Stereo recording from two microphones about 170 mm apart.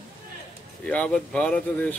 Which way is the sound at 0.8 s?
5° left (ahead or behind).